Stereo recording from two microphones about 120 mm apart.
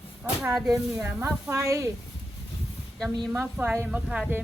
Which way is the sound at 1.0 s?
25° right (ahead or behind).